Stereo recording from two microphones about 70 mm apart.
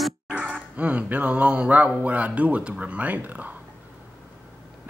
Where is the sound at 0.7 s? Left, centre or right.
Centre.